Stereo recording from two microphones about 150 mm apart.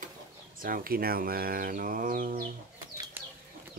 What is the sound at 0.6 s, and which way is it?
Speech, 70° right (ahead or behind).